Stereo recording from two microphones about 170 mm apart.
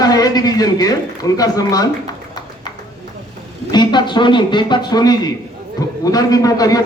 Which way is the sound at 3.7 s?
25° left (ahead or behind).